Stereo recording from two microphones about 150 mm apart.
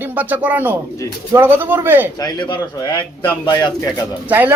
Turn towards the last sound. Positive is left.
turn(degrees=-10)  # may be behind; listen again after turning